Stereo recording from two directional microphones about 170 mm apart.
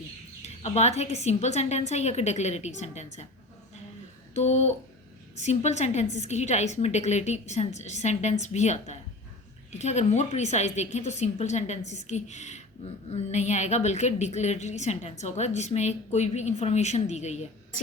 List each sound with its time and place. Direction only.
0.4 s a woman's voice: 40° left (ahead or behind)
4.4 s a woman's voice: 40° left (ahead or behind)